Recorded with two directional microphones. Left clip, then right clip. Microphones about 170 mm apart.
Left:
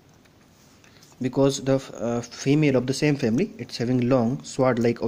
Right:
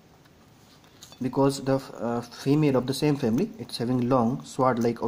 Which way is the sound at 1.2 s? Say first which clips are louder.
Left 2 dB; 35° left (ahead or behind).